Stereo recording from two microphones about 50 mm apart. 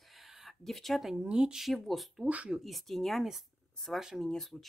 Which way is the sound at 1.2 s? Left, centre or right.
Centre.